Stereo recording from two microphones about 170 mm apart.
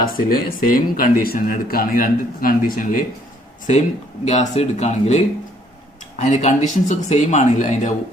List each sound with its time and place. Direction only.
0.0 s speech: 60° left (ahead or behind)
4.3 s speech: 40° left (ahead or behind)